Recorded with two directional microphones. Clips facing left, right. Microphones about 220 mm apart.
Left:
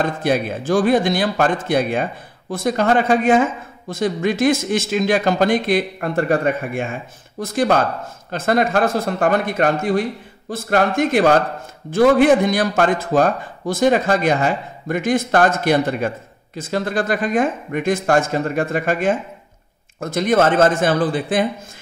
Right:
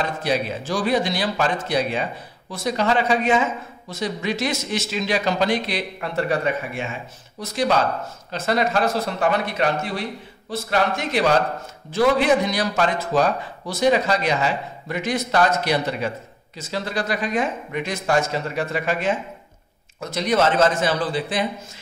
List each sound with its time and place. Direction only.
0.0 s a man's voice: 50° left (ahead or behind)